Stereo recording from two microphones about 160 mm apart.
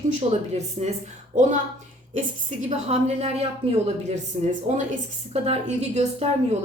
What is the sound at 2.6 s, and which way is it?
A woman's voice, 45° right (ahead or behind).